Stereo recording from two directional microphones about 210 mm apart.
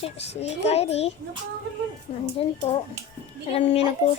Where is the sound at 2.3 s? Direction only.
30° left (ahead or behind).